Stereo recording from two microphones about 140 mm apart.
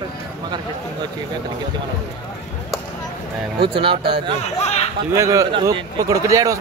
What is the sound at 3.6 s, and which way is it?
Speech, 40° right (ahead or behind).